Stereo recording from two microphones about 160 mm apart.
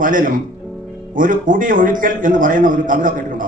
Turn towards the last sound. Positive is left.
turn(degrees=-60)  # may be behind; listen again after turning